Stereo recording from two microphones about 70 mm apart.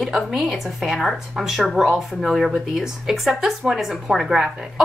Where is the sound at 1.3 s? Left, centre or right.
Centre.